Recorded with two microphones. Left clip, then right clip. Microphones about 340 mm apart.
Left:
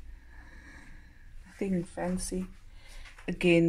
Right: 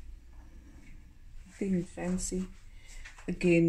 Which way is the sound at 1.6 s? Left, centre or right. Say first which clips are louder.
Left 2 dB; left.